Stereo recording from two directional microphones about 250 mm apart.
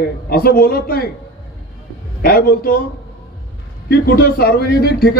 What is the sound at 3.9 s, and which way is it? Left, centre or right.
A man's voice, left.